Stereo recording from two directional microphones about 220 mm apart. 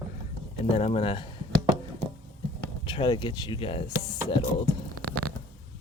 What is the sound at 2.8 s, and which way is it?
Speech, 20° left (ahead or behind).